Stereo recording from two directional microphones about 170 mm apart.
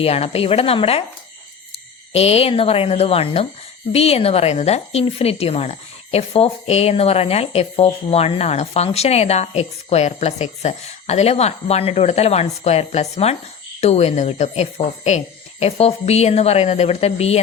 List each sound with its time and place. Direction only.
0.0 s speech: 35° left (ahead or behind)
2.1 s speech: 35° left (ahead or behind)